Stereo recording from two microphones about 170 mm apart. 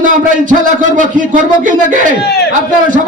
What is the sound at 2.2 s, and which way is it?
Speech, 70° left (ahead or behind).